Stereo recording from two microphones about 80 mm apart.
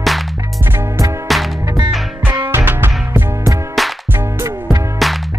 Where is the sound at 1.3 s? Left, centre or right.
Centre.